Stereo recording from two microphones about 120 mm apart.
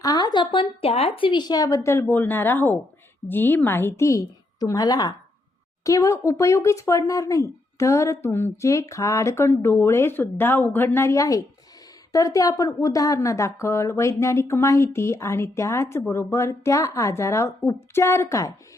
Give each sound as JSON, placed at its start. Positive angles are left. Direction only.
{"t": 0.0, "sound": "a woman's voice", "side_deg": 30}